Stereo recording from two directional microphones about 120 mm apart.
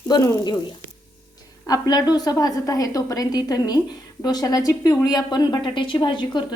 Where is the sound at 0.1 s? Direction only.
35° left (ahead or behind).